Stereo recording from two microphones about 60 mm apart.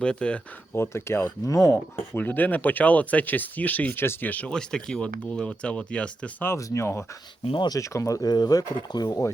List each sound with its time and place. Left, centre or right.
0.0 s speech: centre
0.7 s speech: left
1.5 s speech: left
1.7 s speech: left
4.0 s speech: left
4.3 s speech: left
4.5 s speech: centre
6.6 s speech: left